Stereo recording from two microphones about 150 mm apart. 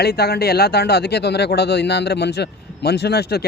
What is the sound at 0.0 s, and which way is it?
Speech, 90° left.